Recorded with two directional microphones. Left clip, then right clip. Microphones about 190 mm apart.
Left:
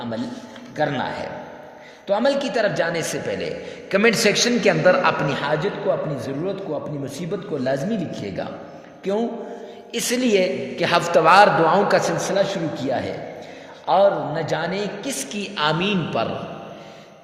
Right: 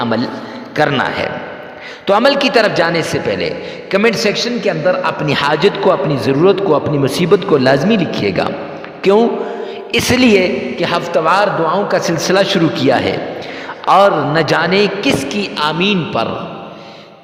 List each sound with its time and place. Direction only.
0.8 s a man's voice: 50° right (ahead or behind)
3.9 s a man's voice: 20° right (ahead or behind)
5.2 s a man's voice: 40° right (ahead or behind)
9.9 s a woman's voice: 40° right (ahead or behind)
10.8 s a man's voice: 20° right (ahead or behind)
12.1 s a man's voice: 50° right (ahead or behind); by 16.3 s 30° right (ahead or behind)